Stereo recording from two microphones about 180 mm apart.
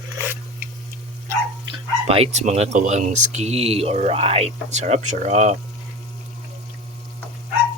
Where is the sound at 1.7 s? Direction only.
35° right (ahead or behind).